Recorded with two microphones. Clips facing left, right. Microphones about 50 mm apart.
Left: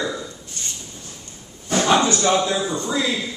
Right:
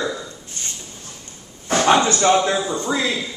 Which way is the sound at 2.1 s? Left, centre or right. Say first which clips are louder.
Right 3 dB; right.